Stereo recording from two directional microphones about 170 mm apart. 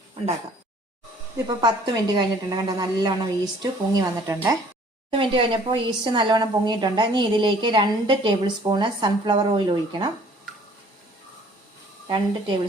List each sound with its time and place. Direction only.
1.5 s a woman's voice: 25° right (ahead or behind)
12.0 s a woman's voice: 30° right (ahead or behind)